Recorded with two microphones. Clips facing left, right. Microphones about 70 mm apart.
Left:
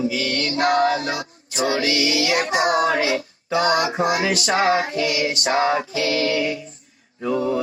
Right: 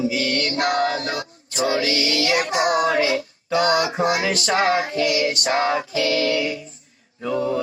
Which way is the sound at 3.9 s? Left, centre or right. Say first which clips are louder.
Even; centre.